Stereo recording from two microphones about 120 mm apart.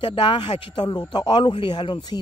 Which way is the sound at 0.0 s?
45° left (ahead or behind).